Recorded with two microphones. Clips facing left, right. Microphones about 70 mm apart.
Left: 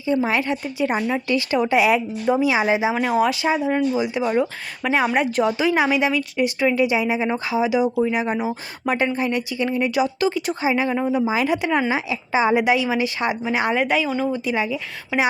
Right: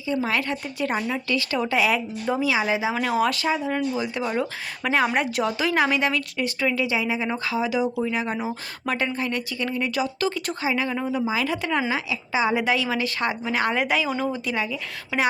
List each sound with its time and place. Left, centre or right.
0.1 s a woman's voice: centre
0.9 s a woman's voice: centre
2.9 s a woman's voice: centre
6.7 s a woman's voice: left
11.9 s a woman's voice: left
12.5 s a woman's voice: centre
13.7 s speech: centre
14.5 s a woman's voice: centre